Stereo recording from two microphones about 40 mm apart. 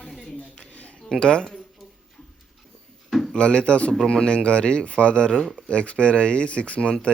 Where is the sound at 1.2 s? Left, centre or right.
Centre.